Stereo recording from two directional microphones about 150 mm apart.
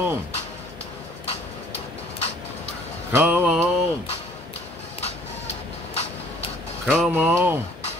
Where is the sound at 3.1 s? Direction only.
15° right (ahead or behind).